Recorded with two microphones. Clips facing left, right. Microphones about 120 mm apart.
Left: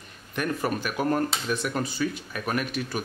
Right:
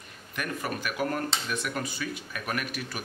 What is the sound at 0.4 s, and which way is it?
Speech, 35° left (ahead or behind).